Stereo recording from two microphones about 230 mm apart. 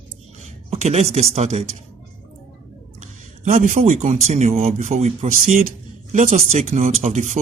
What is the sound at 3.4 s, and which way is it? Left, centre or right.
Speech, right.